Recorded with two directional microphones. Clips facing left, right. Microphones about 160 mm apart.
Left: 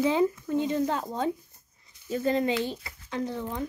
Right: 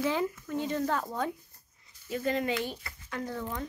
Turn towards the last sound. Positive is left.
turn(degrees=20)  # may be behind; listen again after turning